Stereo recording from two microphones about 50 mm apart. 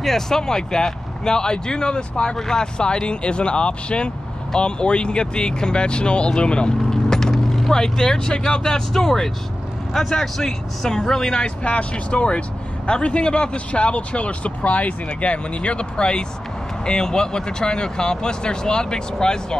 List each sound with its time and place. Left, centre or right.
0.0 s speech: centre
11.6 s speech: left